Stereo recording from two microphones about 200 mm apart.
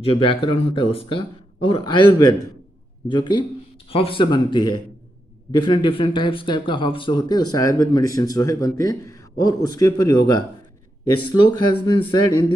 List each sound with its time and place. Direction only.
0.0 s speech: 25° left (ahead or behind)